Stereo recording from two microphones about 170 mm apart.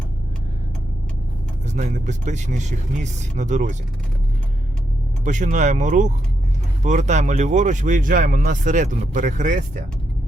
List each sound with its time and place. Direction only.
1.6 s speech: 45° right (ahead or behind)
5.2 s speech: 45° right (ahead or behind)